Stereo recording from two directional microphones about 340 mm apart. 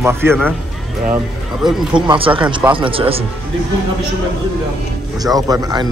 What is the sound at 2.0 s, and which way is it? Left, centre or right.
Speech, centre.